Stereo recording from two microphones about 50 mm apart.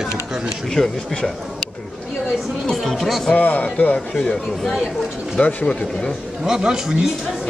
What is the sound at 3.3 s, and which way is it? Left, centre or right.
Speech, left.